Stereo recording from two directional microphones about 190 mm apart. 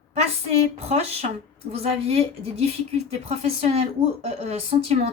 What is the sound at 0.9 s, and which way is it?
Speech, 35° right (ahead or behind).